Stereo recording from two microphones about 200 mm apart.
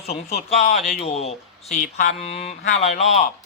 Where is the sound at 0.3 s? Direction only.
30° left (ahead or behind).